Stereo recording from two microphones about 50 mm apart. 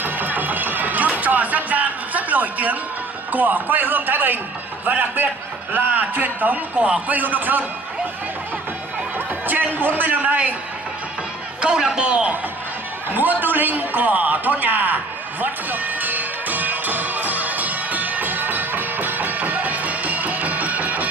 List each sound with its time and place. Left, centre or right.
0.0 s a sound: right
3.3 s a man's voice: right
9.5 s a man's voice: right
11.6 s a man's voice: centre
13.1 s a man's voice: right
15.4 s music: right